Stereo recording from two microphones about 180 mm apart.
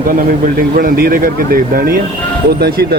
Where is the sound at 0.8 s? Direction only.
55° right (ahead or behind).